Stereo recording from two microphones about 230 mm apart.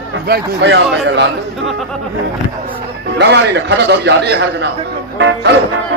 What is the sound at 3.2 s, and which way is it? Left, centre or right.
Speech, right.